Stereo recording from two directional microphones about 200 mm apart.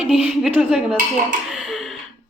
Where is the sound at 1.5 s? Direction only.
Centre (ahead or behind).